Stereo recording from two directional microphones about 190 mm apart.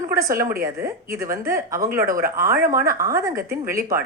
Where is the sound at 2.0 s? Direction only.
50° right (ahead or behind).